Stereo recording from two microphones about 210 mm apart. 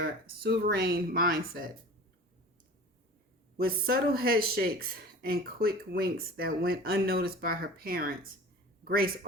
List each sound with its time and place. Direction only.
0.0 s speech: 50° right (ahead or behind)
3.6 s speech: 45° right (ahead or behind)
8.8 s a sound: 45° right (ahead or behind)